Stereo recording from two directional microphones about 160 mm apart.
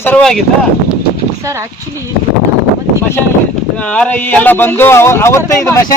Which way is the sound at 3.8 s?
5° left (ahead or behind).